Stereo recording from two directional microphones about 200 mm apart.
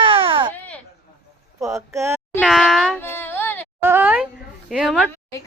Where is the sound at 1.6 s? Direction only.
15° right (ahead or behind).